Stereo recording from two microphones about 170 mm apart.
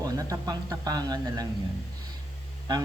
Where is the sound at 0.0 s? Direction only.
20° right (ahead or behind).